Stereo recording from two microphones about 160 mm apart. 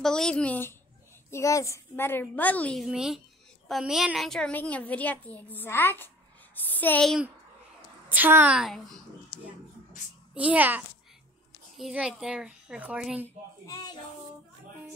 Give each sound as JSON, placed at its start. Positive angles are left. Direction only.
{"t": 0.0, "sound": "a woman's voice", "side_deg": 5}
{"t": 8.1, "sound": "a woman's voice", "side_deg": -10}
{"t": 10.3, "sound": "a woman's voice", "side_deg": -10}
{"t": 13.7, "sound": "speech", "side_deg": 25}